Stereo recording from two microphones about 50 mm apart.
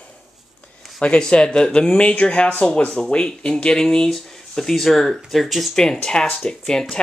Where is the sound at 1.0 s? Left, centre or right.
Left; by 5.7 s centre.